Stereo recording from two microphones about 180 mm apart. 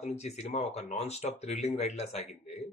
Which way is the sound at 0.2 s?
40° left (ahead or behind).